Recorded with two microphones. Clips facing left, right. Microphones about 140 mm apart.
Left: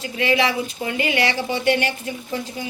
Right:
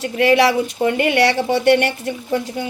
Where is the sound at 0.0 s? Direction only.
65° right (ahead or behind).